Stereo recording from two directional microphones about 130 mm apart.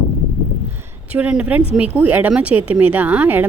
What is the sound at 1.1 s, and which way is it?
A woman's voice, 10° right (ahead or behind).